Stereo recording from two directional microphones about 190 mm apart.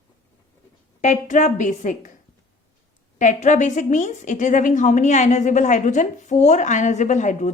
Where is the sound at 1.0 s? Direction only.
40° left (ahead or behind).